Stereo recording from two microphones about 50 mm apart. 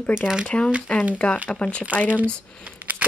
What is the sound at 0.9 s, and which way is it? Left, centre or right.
Speech, left.